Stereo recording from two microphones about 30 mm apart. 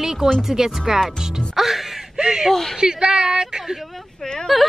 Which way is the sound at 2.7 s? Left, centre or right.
Right.